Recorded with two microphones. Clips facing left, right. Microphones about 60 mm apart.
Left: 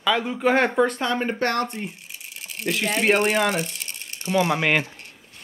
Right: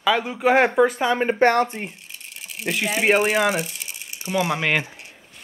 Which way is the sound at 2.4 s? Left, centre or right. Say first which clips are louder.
Even; centre.